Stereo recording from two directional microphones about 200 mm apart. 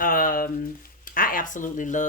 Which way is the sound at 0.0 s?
45° left (ahead or behind).